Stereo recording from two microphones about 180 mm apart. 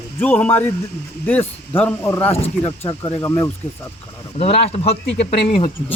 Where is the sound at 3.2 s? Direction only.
15° left (ahead or behind).